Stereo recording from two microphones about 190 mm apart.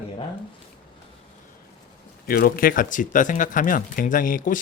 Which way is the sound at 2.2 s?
50° left (ahead or behind).